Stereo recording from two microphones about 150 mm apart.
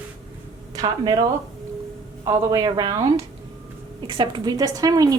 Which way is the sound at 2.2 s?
25° right (ahead or behind).